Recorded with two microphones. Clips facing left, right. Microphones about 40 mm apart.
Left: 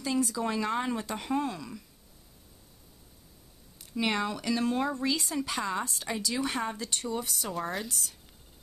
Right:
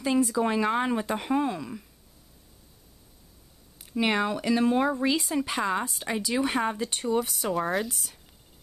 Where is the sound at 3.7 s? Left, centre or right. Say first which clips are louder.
Right 4 dB; right.